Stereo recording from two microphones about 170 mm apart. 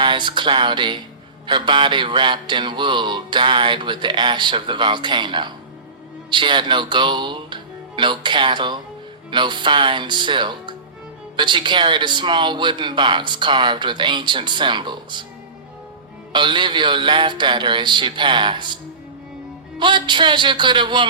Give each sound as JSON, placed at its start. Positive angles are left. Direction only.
{"t": 0.0, "sound": "speech", "side_deg": -25}
{"t": 16.3, "sound": "speech", "side_deg": -25}
{"t": 19.8, "sound": "speech", "side_deg": -25}